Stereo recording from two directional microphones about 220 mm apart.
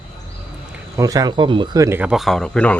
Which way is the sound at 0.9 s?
15° right (ahead or behind).